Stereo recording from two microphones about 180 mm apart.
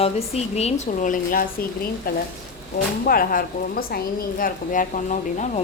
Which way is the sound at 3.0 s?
55° left (ahead or behind).